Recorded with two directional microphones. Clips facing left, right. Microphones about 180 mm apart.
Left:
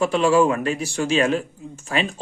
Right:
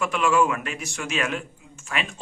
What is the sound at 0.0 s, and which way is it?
Speech, 30° left (ahead or behind).